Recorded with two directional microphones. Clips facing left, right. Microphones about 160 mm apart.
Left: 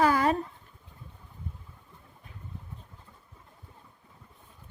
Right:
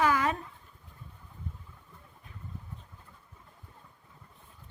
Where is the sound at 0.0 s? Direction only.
35° left (ahead or behind).